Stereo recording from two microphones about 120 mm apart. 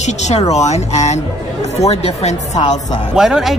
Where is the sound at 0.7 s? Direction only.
70° left (ahead or behind).